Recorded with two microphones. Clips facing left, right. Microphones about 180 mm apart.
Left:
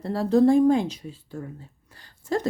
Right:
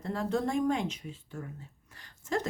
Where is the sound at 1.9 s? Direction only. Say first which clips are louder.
Left 6 dB; 30° left (ahead or behind).